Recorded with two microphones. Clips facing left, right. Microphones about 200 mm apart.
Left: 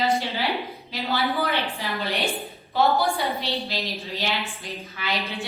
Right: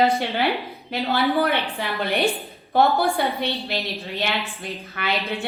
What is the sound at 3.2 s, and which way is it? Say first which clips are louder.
Speech: right 3 dB; 60° right (ahead or behind).